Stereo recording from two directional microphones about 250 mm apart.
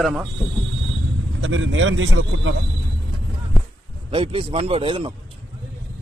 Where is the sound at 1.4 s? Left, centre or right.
Right.